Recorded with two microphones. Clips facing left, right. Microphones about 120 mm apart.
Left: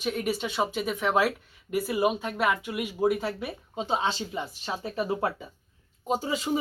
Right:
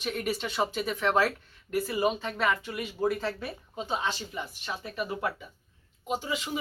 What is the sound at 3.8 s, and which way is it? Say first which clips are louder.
Speech: left 4 dB; 30° left (ahead or behind).